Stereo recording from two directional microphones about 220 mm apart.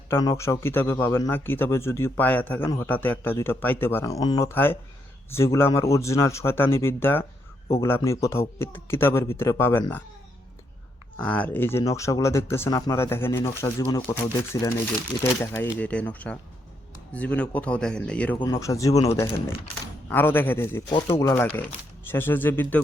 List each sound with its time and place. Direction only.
0.1 s a man's voice: 15° left (ahead or behind)
11.2 s a man's voice: 10° left (ahead or behind)
18.3 s a man's voice: 15° left (ahead or behind)